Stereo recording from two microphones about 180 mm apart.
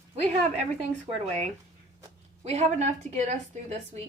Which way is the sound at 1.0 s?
40° right (ahead or behind).